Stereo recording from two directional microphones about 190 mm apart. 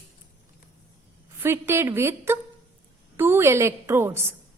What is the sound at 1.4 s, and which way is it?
A woman's voice, 15° right (ahead or behind).